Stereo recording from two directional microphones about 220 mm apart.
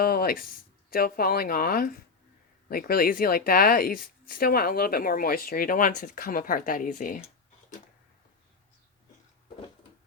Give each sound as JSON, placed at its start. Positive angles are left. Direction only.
{"t": 0.0, "sound": "speech", "side_deg": 45}